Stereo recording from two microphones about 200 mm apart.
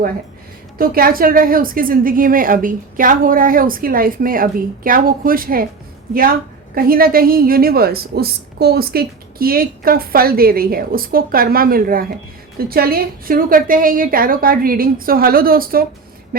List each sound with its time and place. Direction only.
0.8 s a woman's voice: 45° right (ahead or behind)
6.7 s a woman's voice: 45° right (ahead or behind)